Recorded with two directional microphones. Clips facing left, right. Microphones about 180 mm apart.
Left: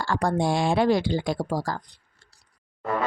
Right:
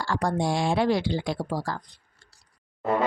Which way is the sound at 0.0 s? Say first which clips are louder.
Left 2 dB; 55° left (ahead or behind).